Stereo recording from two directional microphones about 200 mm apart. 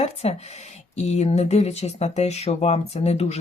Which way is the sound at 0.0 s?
30° left (ahead or behind).